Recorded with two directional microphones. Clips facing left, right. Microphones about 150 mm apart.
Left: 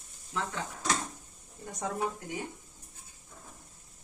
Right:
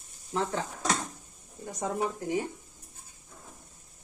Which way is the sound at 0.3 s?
40° right (ahead or behind).